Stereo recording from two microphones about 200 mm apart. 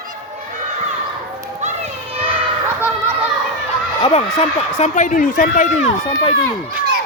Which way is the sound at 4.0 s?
30° left (ahead or behind).